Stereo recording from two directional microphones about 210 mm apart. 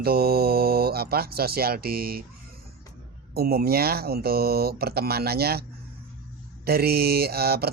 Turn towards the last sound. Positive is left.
turn(degrees=-50)  # may be behind; listen again after turning